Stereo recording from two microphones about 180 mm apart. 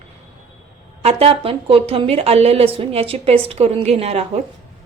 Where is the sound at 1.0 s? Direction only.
30° right (ahead or behind).